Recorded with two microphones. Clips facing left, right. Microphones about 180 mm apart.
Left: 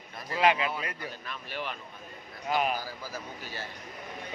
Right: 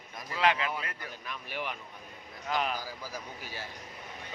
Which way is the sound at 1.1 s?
15° right (ahead or behind).